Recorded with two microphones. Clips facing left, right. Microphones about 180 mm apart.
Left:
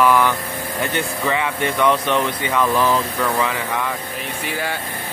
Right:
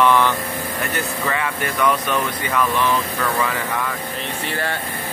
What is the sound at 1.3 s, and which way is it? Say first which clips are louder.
Speech: left 3 dB; 20° left (ahead or behind).